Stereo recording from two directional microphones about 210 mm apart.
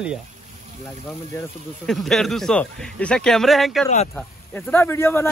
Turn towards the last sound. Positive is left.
turn(degrees=10)  # may be behind; listen again after turning